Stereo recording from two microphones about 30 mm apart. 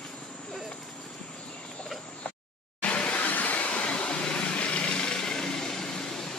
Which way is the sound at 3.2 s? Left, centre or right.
Left.